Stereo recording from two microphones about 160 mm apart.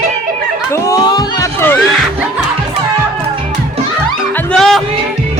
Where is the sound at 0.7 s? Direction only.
25° left (ahead or behind).